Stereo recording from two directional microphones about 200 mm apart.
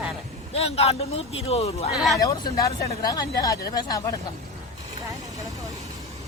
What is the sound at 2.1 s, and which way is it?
Speech, 20° left (ahead or behind).